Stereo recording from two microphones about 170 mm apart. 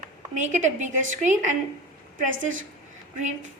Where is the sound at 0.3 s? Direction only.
45° right (ahead or behind).